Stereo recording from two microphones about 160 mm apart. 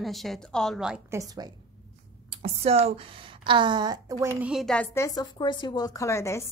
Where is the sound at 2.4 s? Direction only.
40° right (ahead or behind).